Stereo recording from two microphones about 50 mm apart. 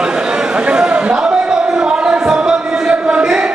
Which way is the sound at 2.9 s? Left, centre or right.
Centre.